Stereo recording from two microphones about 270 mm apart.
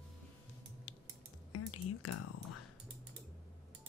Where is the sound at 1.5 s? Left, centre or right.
Left.